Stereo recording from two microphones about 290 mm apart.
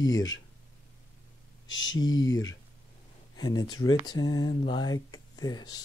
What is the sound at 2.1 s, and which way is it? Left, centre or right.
Speech, centre.